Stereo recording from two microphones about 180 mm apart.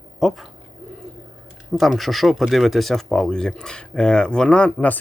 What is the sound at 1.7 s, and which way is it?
Speech, centre (ahead or behind).